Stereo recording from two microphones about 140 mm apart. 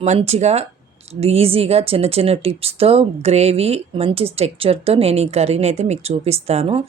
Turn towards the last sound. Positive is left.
turn(degrees=-45)  # may be behind; listen again after turning